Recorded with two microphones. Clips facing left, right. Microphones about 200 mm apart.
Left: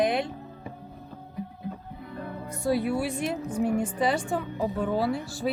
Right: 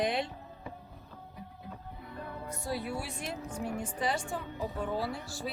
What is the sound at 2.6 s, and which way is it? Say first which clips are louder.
A woman's voice: left 11 dB; 70° left (ahead or behind).